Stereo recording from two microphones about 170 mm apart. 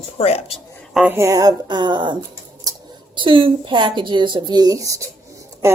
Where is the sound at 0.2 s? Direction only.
40° left (ahead or behind).